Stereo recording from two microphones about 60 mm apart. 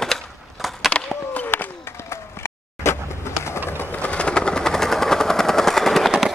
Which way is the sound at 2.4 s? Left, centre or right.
Left.